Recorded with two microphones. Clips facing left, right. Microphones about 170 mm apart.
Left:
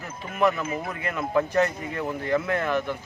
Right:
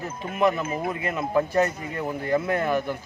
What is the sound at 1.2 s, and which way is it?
Speech, 15° right (ahead or behind).